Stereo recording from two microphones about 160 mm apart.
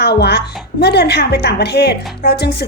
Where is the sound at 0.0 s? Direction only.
90° left.